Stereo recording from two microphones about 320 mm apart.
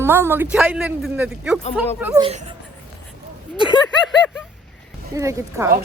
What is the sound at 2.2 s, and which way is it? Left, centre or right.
Speech, centre.